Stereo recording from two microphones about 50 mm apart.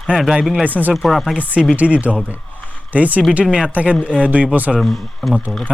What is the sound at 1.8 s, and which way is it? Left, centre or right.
Speech, right.